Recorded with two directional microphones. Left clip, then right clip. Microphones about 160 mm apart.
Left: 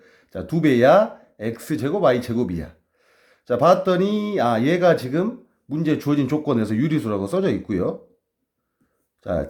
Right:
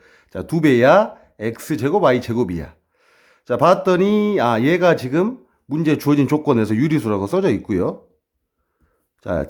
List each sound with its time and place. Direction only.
0.0 s speech: 25° right (ahead or behind)
9.2 s speech: 25° right (ahead or behind)